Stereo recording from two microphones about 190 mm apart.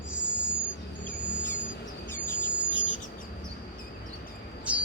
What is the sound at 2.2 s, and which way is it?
Insect, 45° left (ahead or behind).